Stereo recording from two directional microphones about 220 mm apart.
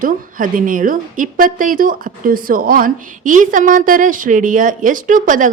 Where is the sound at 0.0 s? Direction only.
40° right (ahead or behind).